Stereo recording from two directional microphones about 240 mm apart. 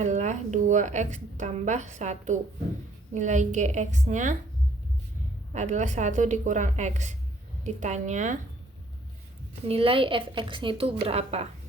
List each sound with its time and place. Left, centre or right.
0.0 s a woman's voice: right
5.5 s speech: right
9.6 s speech: right